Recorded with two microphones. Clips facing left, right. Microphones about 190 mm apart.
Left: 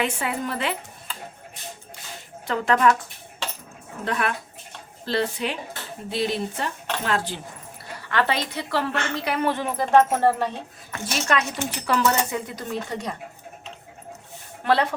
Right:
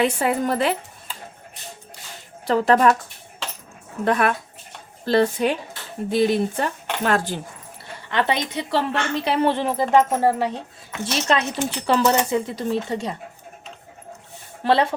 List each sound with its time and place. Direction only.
0.0 s speech: 40° right (ahead or behind)
2.5 s speech: 35° right (ahead or behind)
4.0 s speech: 50° right (ahead or behind)
8.1 s speech: 20° right (ahead or behind)
9.9 s speech: 10° right (ahead or behind)
10.9 s speech: 25° right (ahead or behind)
14.6 s speech: 25° right (ahead or behind)